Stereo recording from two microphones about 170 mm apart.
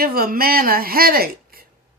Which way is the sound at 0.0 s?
60° right (ahead or behind).